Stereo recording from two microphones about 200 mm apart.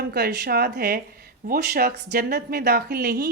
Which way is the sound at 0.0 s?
50° right (ahead or behind).